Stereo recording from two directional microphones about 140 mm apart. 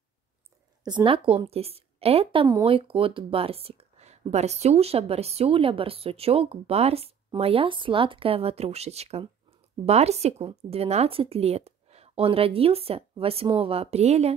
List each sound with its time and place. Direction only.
0.8 s a woman's voice: 35° right (ahead or behind); by 14.3 s 50° right (ahead or behind)